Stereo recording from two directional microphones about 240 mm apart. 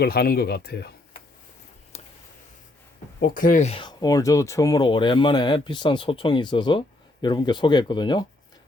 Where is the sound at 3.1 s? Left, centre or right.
Left.